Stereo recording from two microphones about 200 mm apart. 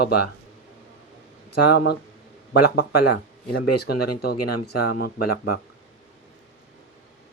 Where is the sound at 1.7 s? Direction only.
55° left (ahead or behind).